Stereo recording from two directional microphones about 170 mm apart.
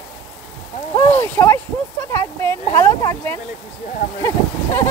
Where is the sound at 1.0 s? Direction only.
15° left (ahead or behind).